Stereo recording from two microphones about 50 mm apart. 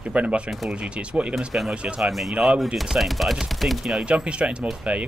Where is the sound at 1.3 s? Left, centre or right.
Centre.